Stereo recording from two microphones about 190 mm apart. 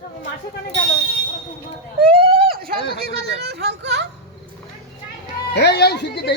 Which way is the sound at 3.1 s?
60° right (ahead or behind).